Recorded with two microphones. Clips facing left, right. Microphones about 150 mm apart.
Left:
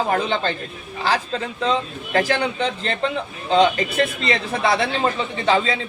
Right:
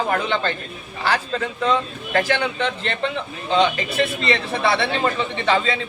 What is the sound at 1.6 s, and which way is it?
Speech, 30° left (ahead or behind).